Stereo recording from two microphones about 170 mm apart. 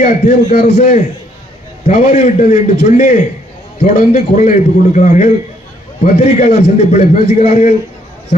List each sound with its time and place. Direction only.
0.0 s a man's voice: 45° left (ahead or behind)